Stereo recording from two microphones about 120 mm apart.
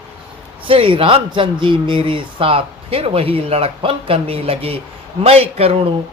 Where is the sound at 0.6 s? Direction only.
50° right (ahead or behind).